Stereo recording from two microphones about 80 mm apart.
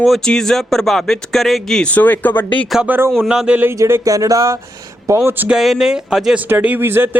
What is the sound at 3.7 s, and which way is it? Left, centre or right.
Speech, right.